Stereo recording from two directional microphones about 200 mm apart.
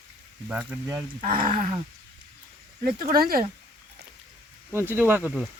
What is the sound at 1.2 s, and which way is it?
Speech, 45° right (ahead or behind).